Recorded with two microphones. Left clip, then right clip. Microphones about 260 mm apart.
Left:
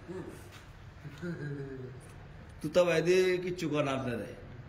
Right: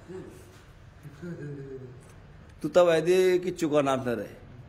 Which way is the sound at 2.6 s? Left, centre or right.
Centre.